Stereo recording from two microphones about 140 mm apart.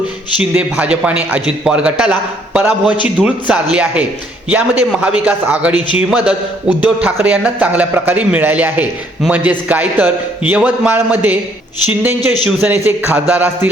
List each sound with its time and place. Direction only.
0.3 s a man's voice: 10° right (ahead or behind)